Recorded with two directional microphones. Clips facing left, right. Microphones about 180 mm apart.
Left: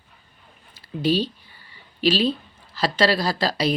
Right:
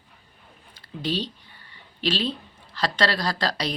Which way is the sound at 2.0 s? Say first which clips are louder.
Left 6 dB; 5° left (ahead or behind).